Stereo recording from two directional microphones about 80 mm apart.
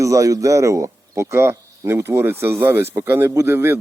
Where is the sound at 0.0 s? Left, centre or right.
Right.